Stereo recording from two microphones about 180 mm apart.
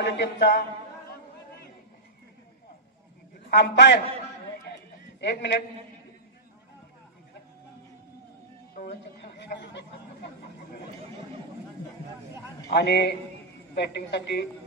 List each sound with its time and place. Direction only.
0.0 s speech: 75° left (ahead or behind)
3.4 s speech: 75° left (ahead or behind)
5.2 s speech: 70° left (ahead or behind)
8.7 s speech: 65° left (ahead or behind)
12.6 s speech: 65° left (ahead or behind)